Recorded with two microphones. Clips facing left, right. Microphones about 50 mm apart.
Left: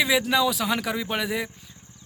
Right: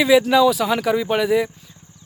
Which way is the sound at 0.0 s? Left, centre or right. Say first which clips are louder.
Right 8 dB; centre.